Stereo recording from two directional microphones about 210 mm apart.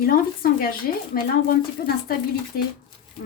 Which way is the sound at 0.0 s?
45° left (ahead or behind).